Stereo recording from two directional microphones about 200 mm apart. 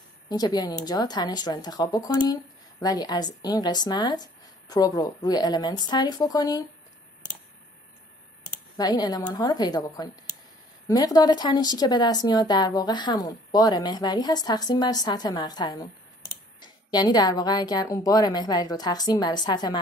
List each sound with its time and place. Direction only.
0.3 s a woman's voice: 20° left (ahead or behind)
8.7 s a woman's voice: 20° left (ahead or behind)